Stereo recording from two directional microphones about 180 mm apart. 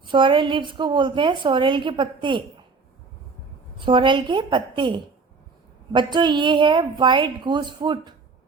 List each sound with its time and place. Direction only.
0.0 s a woman's voice: 25° right (ahead or behind)
3.8 s a woman's voice: 25° right (ahead or behind)